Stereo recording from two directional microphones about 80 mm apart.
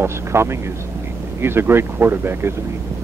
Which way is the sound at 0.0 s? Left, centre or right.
Right.